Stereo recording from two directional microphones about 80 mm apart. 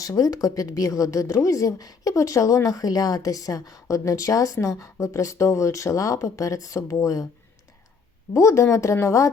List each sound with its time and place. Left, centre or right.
0.0 s a woman's voice: left
8.3 s speech: left